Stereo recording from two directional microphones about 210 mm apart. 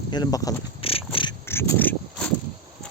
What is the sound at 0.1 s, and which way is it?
Insect, 20° left (ahead or behind).